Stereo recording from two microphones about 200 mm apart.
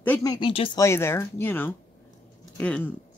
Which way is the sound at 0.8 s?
15° left (ahead or behind).